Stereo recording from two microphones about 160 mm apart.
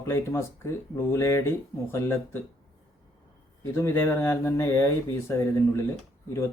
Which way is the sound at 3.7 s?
15° left (ahead or behind).